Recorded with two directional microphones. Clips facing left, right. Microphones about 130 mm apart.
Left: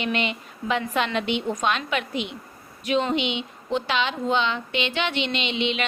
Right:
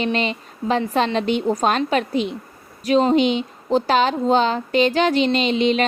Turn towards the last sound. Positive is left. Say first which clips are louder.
# right 8 dB
turn(degrees=-40)  # may be behind; listen again after turning